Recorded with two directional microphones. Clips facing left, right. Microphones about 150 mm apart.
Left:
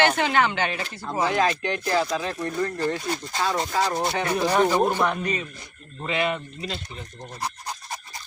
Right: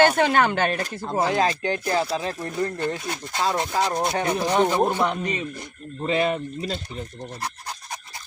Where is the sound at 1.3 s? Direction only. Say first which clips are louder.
Right 1 dB; 30° right (ahead or behind).